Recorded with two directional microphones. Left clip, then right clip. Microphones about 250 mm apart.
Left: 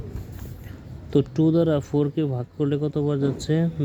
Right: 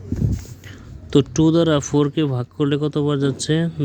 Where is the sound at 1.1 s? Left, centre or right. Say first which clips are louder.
Right 4 dB; right.